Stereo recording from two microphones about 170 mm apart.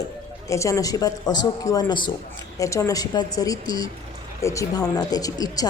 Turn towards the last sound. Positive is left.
turn(degrees=20)  # may be behind; listen again after turning